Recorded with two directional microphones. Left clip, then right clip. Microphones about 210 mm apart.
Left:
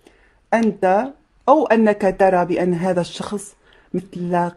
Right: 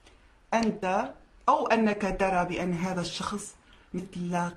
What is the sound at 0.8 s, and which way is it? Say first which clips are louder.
Speech: left 12 dB; 40° left (ahead or behind).